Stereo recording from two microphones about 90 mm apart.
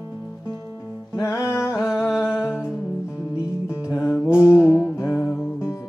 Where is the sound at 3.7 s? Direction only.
30° left (ahead or behind).